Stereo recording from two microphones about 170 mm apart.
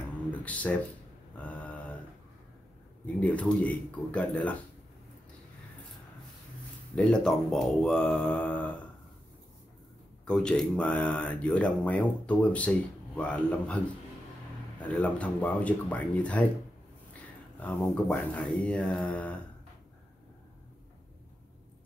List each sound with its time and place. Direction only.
0.3 s a sound: 10° left (ahead or behind)
3.2 s speech: 10° left (ahead or behind)
7.0 s speech: 5° left (ahead or behind)
10.2 s speech: 5° left (ahead or behind)
14.8 s speech: 5° left (ahead or behind)
17.6 s speech: 10° left (ahead or behind)